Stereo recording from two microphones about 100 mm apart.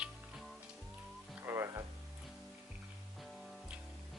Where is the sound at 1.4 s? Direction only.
30° right (ahead or behind).